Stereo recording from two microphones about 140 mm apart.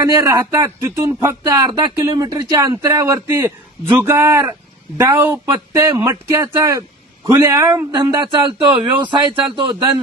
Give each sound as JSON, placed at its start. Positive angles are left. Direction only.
{"t": 0.0, "sound": "speech", "side_deg": -20}
{"t": 8.2, "sound": "speech", "side_deg": -35}